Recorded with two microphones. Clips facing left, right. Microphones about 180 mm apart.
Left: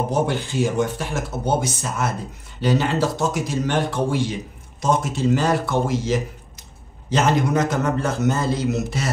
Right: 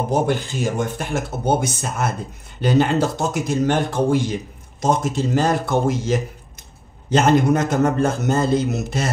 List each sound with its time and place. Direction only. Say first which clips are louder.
0.1 s a man's voice: right 2 dB; 50° right (ahead or behind)